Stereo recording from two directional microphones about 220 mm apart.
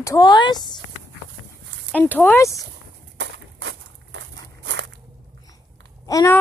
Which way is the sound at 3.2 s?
55° right (ahead or behind).